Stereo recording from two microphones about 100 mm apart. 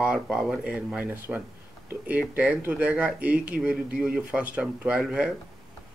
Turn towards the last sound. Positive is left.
turn(degrees=-10)  # may be behind; listen again after turning